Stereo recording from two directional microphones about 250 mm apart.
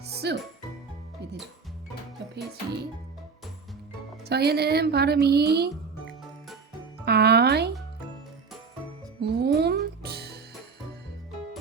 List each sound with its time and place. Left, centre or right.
0.0 s music: right
4.3 s a woman's voice: right
7.0 s music: right
9.2 s music: right